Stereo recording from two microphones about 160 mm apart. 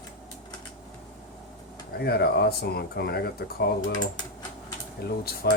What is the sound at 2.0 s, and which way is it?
Speech, 85° left.